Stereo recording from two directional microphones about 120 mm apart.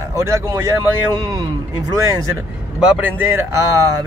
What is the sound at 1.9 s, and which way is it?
Speech, 25° right (ahead or behind).